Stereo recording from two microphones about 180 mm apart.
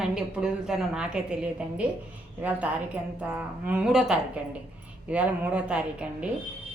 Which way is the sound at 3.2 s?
5° right (ahead or behind).